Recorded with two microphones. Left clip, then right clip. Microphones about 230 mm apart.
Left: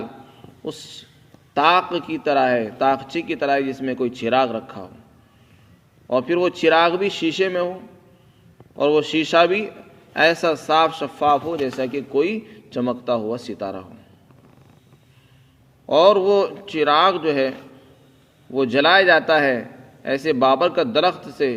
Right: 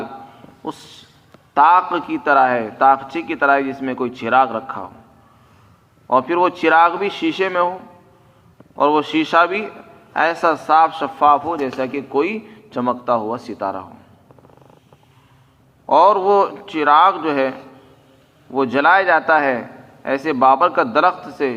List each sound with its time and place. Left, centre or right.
1.5 s a man's voice: left
6.1 s a man's voice: left
8.8 s a man's voice: left
15.9 s a man's voice: left
18.5 s a man's voice: left